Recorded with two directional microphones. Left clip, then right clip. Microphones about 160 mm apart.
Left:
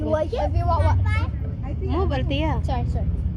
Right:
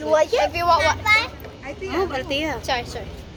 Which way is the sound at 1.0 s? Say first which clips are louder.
Right 13 dB; 20° right (ahead or behind).